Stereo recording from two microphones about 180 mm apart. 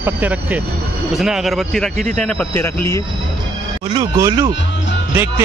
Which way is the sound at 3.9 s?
30° right (ahead or behind).